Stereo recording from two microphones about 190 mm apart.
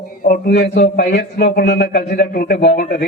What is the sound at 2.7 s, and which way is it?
Speech, 45° left (ahead or behind).